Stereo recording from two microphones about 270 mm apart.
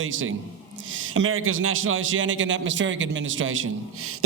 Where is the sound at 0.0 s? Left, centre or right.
Right.